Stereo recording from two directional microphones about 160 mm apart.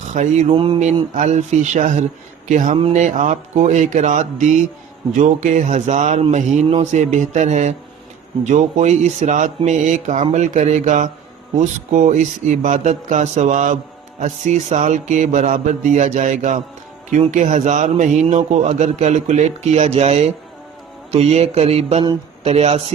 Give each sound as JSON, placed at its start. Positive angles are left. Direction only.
{"t": 0.1, "sound": "mantra", "side_deg": -45}
{"t": 0.5, "sound": "speech", "side_deg": -30}
{"t": 0.8, "sound": "a man's voice", "side_deg": -50}